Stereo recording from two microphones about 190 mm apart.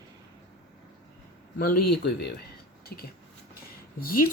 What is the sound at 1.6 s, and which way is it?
A man's voice, 55° left (ahead or behind).